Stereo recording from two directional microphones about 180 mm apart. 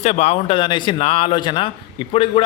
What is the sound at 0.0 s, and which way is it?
Speech, 35° left (ahead or behind).